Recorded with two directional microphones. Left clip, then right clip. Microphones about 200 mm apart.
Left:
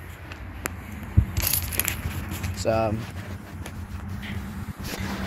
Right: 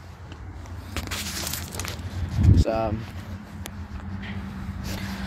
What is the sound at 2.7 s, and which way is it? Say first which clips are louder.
Speech: left 4 dB; 10° left (ahead or behind).